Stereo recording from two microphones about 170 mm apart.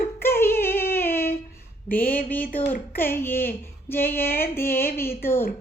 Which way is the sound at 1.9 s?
25° left (ahead or behind).